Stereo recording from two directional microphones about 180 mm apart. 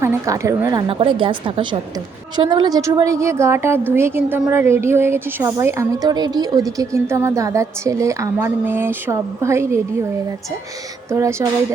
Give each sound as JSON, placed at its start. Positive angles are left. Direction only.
{"t": 0.0, "sound": "a woman's voice", "side_deg": -15}
{"t": 11.1, "sound": "a woman's voice", "side_deg": -15}